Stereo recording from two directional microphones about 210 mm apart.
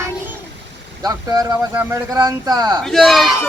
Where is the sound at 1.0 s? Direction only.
15° right (ahead or behind).